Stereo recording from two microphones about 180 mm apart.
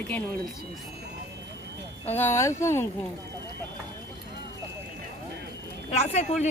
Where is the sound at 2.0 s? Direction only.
10° left (ahead or behind).